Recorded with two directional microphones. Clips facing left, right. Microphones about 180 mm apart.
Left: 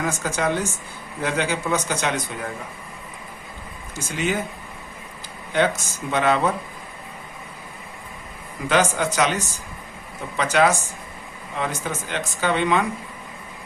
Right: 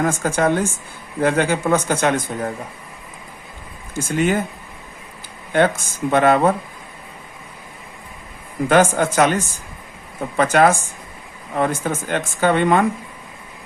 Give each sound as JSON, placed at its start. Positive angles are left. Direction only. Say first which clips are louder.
{"t": 0.0, "sound": "speech", "louder": "right 6 dB", "side_deg": -50}
{"t": 3.9, "sound": "speech", "louder": "right 6 dB", "side_deg": -50}
{"t": 5.5, "sound": "speech", "louder": "right 4 dB", "side_deg": -50}
{"t": 8.7, "sound": "speech", "louder": "right 5 dB", "side_deg": -50}